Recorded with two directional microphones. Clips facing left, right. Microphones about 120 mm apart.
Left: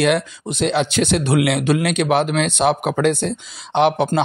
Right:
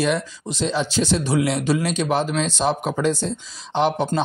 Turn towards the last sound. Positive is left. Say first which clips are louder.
# left 4 dB
turn(degrees=70)  # may be behind; listen again after turning